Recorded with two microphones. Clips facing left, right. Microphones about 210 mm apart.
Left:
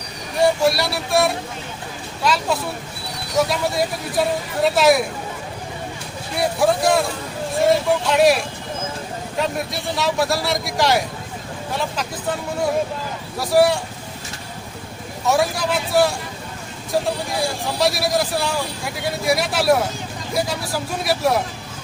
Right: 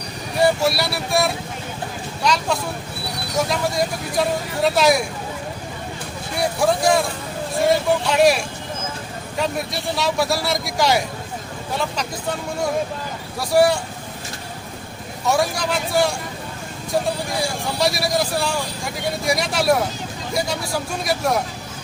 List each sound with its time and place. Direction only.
0.3 s a man's voice: centre (ahead or behind)
6.3 s a man's voice: centre (ahead or behind)
13.4 s a man's voice: centre (ahead or behind)
15.3 s a man's voice: centre (ahead or behind)